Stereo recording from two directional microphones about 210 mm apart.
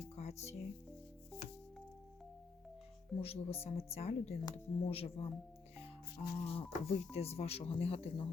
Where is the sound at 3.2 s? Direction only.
30° left (ahead or behind).